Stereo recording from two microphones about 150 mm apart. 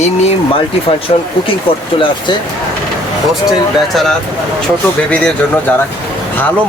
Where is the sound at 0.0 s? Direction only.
45° left (ahead or behind).